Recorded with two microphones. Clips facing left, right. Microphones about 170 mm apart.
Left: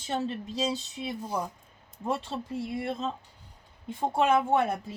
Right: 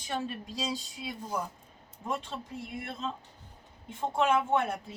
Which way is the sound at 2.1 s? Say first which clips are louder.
Left 4 dB; 35° left (ahead or behind).